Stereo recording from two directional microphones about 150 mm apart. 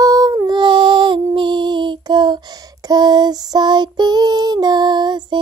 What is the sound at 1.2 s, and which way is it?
Child singing, 30° right (ahead or behind).